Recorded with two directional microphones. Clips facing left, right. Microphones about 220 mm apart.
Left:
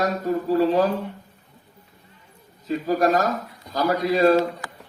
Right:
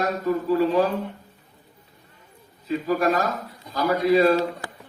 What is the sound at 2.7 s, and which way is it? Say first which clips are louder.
A man's voice: left 1 dB; 45° left (ahead or behind).